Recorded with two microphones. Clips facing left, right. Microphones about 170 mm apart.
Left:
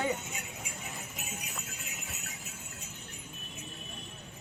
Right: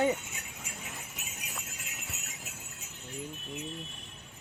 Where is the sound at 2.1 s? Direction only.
75° right (ahead or behind).